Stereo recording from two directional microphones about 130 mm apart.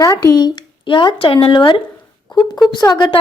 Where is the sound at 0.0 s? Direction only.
25° left (ahead or behind).